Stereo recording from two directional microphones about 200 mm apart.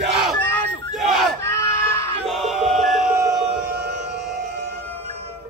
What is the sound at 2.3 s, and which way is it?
Music, centre (ahead or behind).